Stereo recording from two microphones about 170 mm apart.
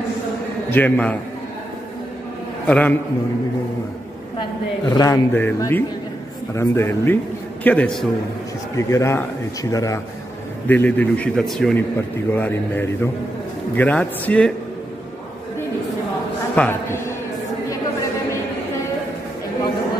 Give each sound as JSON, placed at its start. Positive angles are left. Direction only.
{"t": 0.7, "sound": "a man's voice", "side_deg": 10}
{"t": 2.6, "sound": "a man's voice", "side_deg": 10}
{"t": 4.4, "sound": "a woman's voice", "side_deg": 25}
{"t": 8.7, "sound": "a man's voice", "side_deg": 15}
{"t": 16.5, "sound": "a man's voice", "side_deg": 10}